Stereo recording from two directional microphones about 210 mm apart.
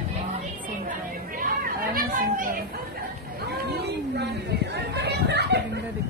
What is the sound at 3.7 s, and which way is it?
Chatter, 50° right (ahead or behind).